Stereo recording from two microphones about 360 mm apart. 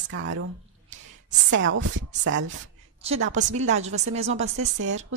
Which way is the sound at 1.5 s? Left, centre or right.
Right.